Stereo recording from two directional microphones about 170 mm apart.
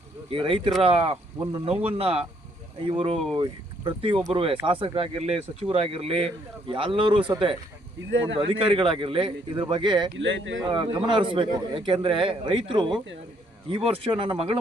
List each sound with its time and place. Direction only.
0.3 s speech: 30° right (ahead or behind)
8.4 s speech: 30° right (ahead or behind)
10.2 s speech: 90° right
10.6 s a man's voice: 25° right (ahead or behind)